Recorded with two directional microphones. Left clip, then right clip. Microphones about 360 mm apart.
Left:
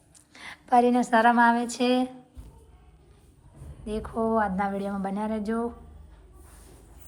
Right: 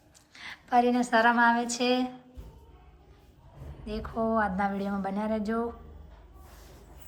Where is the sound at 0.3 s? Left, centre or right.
Centre.